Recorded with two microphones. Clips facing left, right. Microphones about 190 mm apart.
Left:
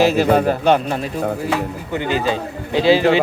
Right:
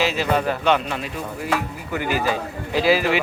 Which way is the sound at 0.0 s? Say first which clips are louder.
Left 7 dB; 45° left (ahead or behind).